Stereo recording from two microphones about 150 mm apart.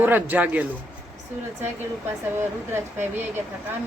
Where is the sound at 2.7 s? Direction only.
15° right (ahead or behind).